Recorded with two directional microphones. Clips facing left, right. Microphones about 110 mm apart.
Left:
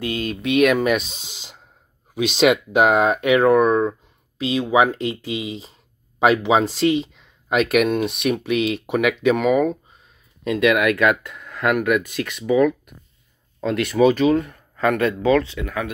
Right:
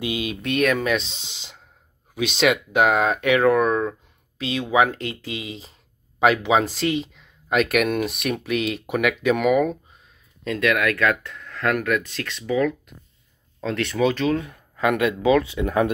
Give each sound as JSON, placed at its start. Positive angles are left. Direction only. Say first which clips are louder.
{"t": 0.0, "sound": "speech", "louder": "left 1 dB", "side_deg": -10}
{"t": 0.4, "sound": "speech", "louder": "left 5 dB", "side_deg": 5}
{"t": 2.7, "sound": "speech", "louder": "left 3 dB", "side_deg": 10}
{"t": 10.4, "sound": "speech", "louder": "left 4 dB", "side_deg": 15}
{"t": 14.4, "sound": "speech", "louder": "left 2 dB", "side_deg": -5}
{"t": 15.6, "sound": "speech", "louder": "right 6 dB", "side_deg": -30}